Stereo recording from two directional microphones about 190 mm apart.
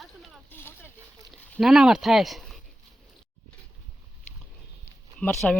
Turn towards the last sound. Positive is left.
turn(degrees=5)  # may be behind; listen again after turning